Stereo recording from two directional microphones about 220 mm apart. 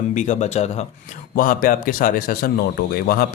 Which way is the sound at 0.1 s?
35° left (ahead or behind).